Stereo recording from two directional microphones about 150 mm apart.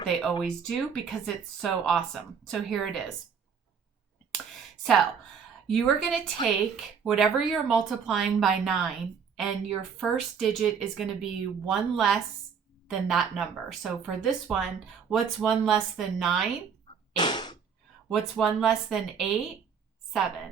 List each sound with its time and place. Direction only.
0.1 s speech: 5° left (ahead or behind)
5.6 s speech: 5° left (ahead or behind)
17.2 s sneeze: 30° left (ahead or behind)
18.1 s speech: centre (ahead or behind)